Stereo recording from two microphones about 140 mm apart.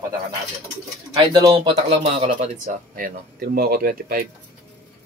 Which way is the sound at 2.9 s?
85° right.